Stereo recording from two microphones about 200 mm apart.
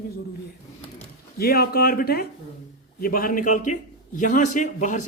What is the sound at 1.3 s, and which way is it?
Speech, 50° left (ahead or behind).